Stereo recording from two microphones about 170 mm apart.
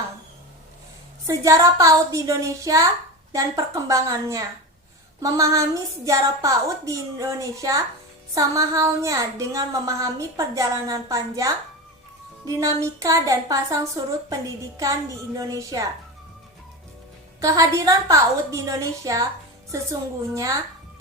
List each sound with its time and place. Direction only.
1.3 s speech: 20° right (ahead or behind)
17.4 s speech: 20° right (ahead or behind)